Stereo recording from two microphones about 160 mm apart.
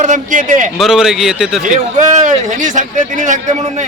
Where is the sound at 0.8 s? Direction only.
5° right (ahead or behind).